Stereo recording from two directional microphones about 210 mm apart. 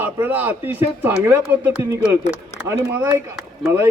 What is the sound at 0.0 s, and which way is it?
A man's voice, 10° right (ahead or behind).